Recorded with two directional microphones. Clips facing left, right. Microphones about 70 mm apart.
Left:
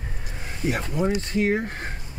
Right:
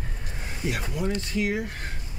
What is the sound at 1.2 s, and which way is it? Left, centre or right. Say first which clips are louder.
Speech: left 4 dB; left.